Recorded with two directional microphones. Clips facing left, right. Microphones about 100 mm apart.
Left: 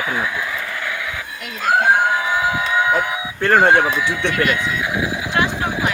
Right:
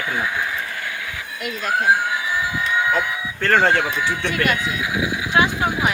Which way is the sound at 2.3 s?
90° left.